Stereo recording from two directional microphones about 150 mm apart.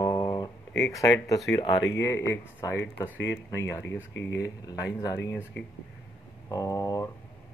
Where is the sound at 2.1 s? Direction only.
15° left (ahead or behind).